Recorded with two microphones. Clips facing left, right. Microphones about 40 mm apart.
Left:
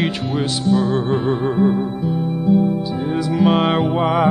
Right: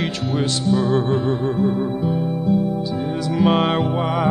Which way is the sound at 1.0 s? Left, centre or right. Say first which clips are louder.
Left 2 dB; centre.